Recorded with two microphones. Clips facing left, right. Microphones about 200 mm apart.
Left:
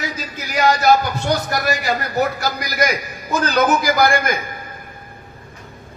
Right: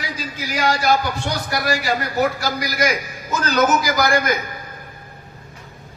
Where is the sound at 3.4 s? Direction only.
55° left (ahead or behind).